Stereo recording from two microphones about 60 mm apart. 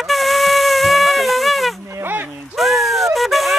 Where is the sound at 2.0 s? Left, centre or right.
Right.